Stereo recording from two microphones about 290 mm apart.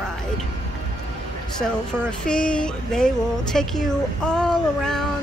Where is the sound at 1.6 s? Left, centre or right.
Centre.